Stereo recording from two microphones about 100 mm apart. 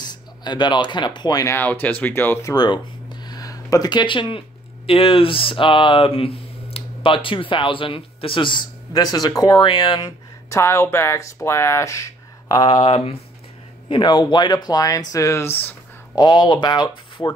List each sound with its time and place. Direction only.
0.0 s speech: 45° left (ahead or behind)
1.6 s speech: 20° left (ahead or behind)
2.5 s a sound: 45° left (ahead or behind)
4.8 s speech: 70° left (ahead or behind); by 10.1 s 50° left (ahead or behind)
10.5 s speech: 25° left (ahead or behind)
12.5 s speech: 45° left (ahead or behind)
12.8 s speech: 65° left (ahead or behind)
13.8 s speech: 50° left (ahead or behind); by 15.7 s 20° left (ahead or behind)
16.2 s speech: 45° left (ahead or behind)